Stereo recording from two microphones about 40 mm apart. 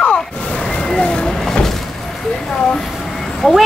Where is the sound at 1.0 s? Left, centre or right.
Left.